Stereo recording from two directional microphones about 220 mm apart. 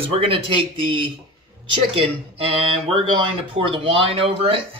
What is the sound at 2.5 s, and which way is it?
Speech, 25° right (ahead or behind).